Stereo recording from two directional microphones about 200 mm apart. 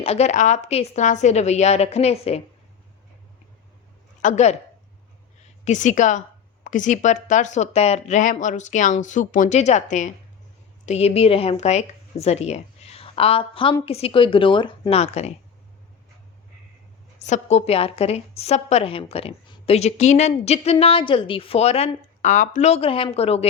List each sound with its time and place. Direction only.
0.0 s a woman's voice: 30° left (ahead or behind)
4.2 s speech: 35° left (ahead or behind)
5.6 s a woman's voice: 40° left (ahead or behind)
17.2 s a woman's voice: 35° left (ahead or behind)